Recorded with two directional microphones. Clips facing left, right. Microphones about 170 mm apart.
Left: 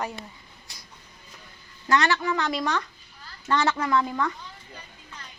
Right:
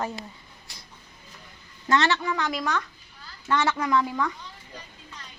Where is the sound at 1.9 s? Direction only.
20° right (ahead or behind).